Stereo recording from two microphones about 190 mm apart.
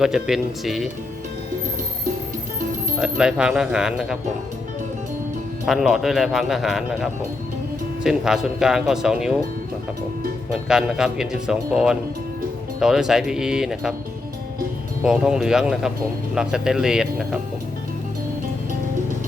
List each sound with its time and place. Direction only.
0.0 s a man's voice: 5° right (ahead or behind)
3.0 s a man's voice: 5° right (ahead or behind)
5.6 s a man's voice: centre (ahead or behind)
10.5 s a man's voice: 5° right (ahead or behind)
15.0 s a man's voice: 5° right (ahead or behind)